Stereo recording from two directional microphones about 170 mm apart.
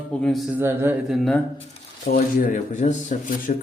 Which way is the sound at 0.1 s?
5° left (ahead or behind).